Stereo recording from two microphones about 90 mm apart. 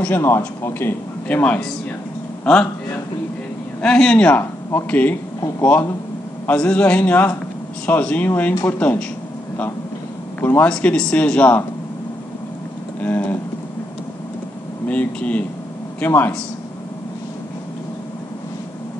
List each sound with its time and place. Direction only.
0.0 s a man's voice: 25° left (ahead or behind)
3.8 s a man's voice: 10° left (ahead or behind)
10.4 s a man's voice: 20° left (ahead or behind)
10.7 s a man's voice: 10° left (ahead or behind)
13.0 s a man's voice: 20° left (ahead or behind)
14.9 s a man's voice: 15° left (ahead or behind)